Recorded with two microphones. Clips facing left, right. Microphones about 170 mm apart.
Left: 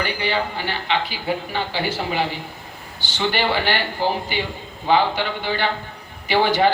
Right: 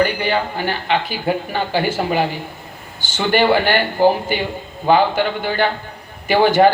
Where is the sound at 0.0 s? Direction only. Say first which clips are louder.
Right 5 dB; 50° right (ahead or behind).